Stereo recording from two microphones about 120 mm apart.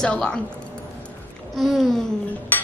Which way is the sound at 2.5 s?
15° left (ahead or behind).